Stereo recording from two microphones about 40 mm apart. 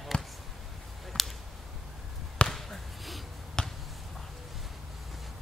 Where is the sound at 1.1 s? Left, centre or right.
Centre.